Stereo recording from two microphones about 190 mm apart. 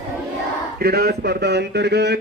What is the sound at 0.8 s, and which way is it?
Speech, 55° right (ahead or behind).